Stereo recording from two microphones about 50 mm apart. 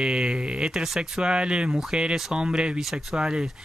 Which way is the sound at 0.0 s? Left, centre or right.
Centre.